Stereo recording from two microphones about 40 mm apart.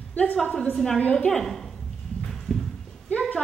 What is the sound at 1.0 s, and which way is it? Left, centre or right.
Speech, left.